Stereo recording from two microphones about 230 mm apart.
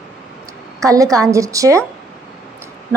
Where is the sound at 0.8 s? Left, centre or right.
Centre.